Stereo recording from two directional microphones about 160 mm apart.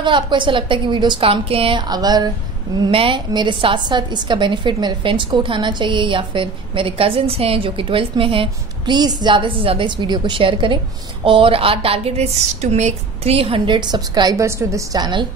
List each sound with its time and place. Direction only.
0.0 s a woman's voice: 30° right (ahead or behind)